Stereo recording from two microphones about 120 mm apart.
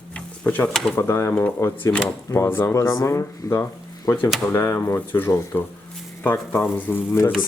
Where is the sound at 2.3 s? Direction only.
20° left (ahead or behind).